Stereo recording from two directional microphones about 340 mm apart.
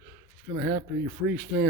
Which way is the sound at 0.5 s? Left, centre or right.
Right.